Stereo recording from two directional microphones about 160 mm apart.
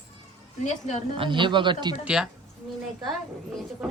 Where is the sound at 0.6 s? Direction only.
45° left (ahead or behind).